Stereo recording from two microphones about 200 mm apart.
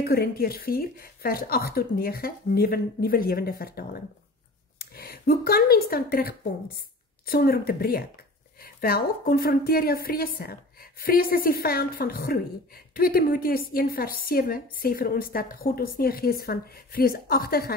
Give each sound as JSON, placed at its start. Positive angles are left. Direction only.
{"t": 0.0, "sound": "a woman's voice", "side_deg": 50}